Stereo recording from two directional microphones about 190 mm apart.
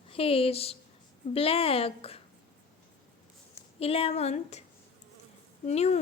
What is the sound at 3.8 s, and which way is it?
Speech, 30° left (ahead or behind).